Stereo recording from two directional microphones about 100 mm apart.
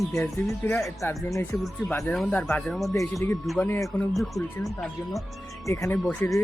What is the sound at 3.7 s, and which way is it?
Speech, 25° left (ahead or behind).